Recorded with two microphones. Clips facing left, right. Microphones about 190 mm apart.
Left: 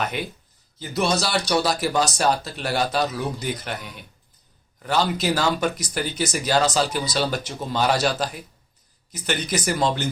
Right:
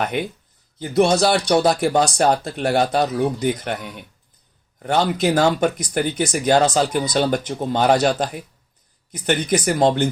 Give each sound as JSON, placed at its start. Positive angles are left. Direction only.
{"t": 0.1, "sound": "speech", "side_deg": -55}